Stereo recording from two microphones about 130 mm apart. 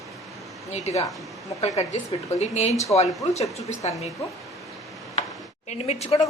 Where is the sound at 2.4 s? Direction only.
60° left (ahead or behind).